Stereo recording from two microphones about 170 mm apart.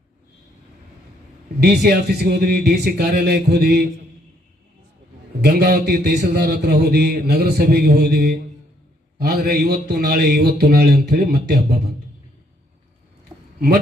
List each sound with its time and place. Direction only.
1.6 s a man's voice: 75° right (ahead or behind)
5.4 s a man's voice: 70° right (ahead or behind)
13.3 s a sound: 25° right (ahead or behind)